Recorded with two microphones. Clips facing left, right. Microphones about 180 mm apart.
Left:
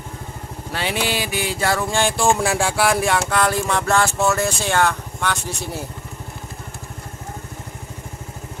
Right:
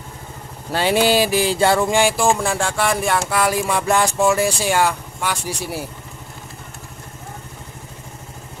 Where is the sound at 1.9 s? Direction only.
5° right (ahead or behind).